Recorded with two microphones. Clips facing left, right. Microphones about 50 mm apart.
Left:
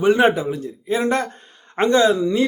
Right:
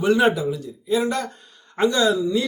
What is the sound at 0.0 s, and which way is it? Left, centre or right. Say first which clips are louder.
Speech: left 2 dB; left.